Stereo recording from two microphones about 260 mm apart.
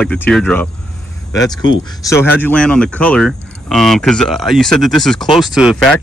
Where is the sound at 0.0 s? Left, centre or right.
Centre.